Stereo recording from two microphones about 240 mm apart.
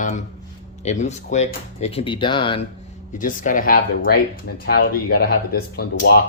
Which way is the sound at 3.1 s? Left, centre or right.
Left.